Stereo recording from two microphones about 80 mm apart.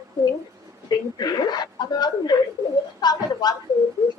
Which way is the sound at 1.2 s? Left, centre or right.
Left.